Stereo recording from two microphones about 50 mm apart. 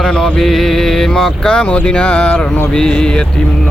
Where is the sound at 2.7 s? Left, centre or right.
Centre.